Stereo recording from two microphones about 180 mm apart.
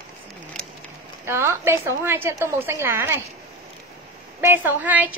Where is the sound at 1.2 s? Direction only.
15° right (ahead or behind).